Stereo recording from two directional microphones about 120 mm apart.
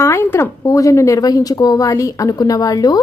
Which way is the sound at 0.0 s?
20° left (ahead or behind).